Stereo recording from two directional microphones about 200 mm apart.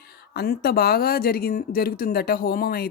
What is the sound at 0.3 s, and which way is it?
Speech, 50° left (ahead or behind).